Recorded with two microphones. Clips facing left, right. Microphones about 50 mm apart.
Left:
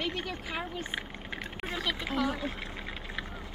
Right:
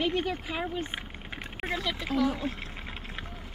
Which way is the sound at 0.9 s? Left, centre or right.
Centre.